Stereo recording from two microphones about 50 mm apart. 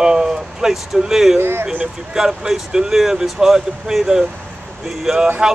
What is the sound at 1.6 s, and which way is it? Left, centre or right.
Speech, right.